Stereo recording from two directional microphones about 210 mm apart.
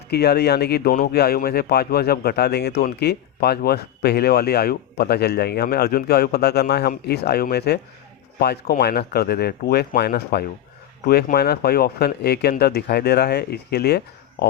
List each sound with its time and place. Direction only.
0.1 s speech: 50° left (ahead or behind)